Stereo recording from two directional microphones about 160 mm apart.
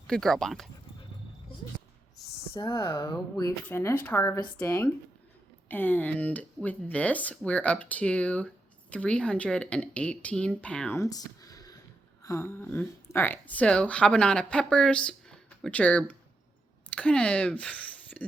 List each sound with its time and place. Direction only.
0.1 s speech: 5° left (ahead or behind)
2.5 s a woman's voice: 25° left (ahead or behind); by 10.9 s 5° left (ahead or behind)
10.9 s a sound: 20° left (ahead or behind)
12.2 s a woman's voice: 20° left (ahead or behind)